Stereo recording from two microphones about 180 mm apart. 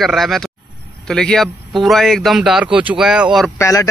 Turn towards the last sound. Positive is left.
turn(degrees=15)  # may be behind; listen again after turning